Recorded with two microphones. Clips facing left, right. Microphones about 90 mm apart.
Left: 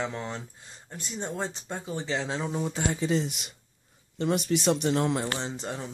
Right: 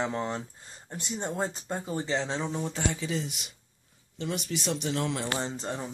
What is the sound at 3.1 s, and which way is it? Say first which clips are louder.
Speech: left 5 dB; 60° left (ahead or behind).